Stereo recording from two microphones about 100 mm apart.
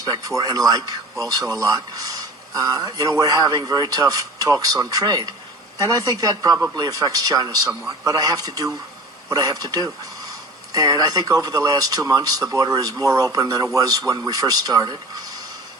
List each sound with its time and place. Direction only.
0.0 s speech: 40° right (ahead or behind)